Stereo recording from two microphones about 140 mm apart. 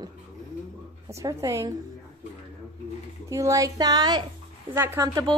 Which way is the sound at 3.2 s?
20° right (ahead or behind).